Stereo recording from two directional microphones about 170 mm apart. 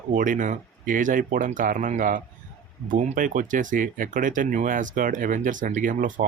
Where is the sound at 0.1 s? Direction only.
50° right (ahead or behind).